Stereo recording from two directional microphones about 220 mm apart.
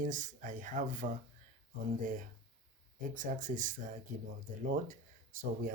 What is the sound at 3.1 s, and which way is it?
Speech, 35° right (ahead or behind).